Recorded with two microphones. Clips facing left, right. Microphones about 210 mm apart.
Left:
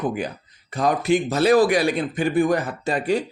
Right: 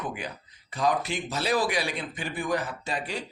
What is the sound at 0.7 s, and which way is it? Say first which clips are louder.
A man's voice: left 7 dB; 50° left (ahead or behind).